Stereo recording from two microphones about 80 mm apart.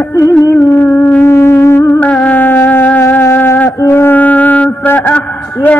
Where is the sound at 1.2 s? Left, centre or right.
Left.